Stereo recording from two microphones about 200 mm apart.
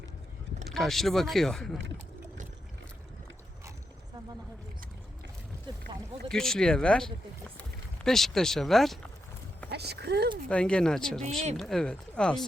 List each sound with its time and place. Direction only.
0.7 s speech: centre (ahead or behind)
5.7 s a sound: 25° right (ahead or behind)
6.2 s speech: 5° left (ahead or behind)
9.6 s speech: 55° right (ahead or behind)
10.5 s speech: 5° left (ahead or behind)